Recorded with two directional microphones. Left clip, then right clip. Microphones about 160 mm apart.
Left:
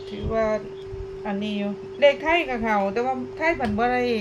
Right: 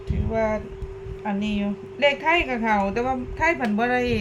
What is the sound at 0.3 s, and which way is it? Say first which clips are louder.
A woman's voice: left 1 dB; 5° left (ahead or behind).